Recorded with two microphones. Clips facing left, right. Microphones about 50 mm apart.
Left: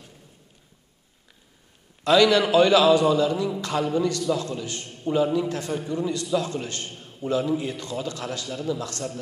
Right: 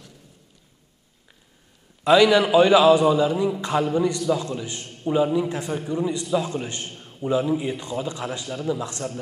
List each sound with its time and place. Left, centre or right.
2.0 s a man's voice: centre